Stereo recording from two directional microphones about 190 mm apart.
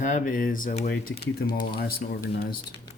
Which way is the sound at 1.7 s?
55° left (ahead or behind).